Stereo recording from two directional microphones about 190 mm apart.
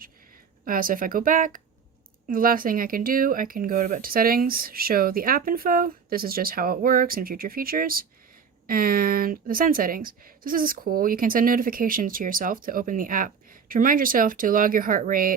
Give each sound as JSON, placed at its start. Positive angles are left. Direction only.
{"t": 0.6, "sound": "speech", "side_deg": -50}